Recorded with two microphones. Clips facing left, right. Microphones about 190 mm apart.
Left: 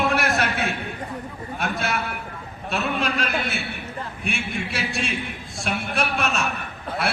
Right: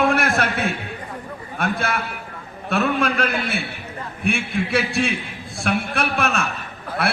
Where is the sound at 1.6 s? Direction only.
55° right (ahead or behind).